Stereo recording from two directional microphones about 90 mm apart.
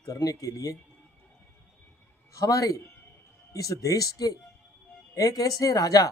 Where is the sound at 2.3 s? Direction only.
40° left (ahead or behind).